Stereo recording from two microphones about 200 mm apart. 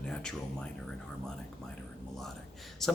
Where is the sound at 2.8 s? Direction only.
Centre (ahead or behind).